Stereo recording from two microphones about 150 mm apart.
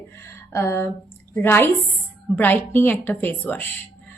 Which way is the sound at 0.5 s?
15° left (ahead or behind).